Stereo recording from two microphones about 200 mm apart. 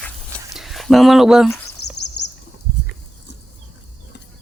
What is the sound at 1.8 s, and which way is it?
Bird, 55° left (ahead or behind).